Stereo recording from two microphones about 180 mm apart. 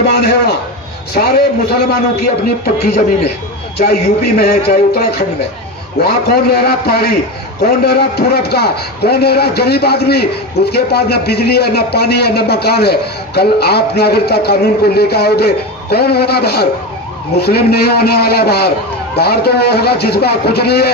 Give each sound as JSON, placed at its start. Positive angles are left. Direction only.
{"t": 0.0, "sound": "a man's voice", "side_deg": 65}
{"t": 3.8, "sound": "a man's voice", "side_deg": 60}